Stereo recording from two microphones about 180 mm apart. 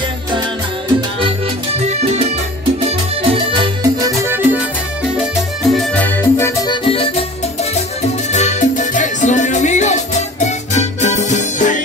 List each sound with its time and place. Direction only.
3.3 s music: 30° right (ahead or behind)
3.8 s music: 15° right (ahead or behind)
5.2 s music: centre (ahead or behind); by 7.2 s 30° left (ahead or behind)
8.3 s music: 40° left (ahead or behind)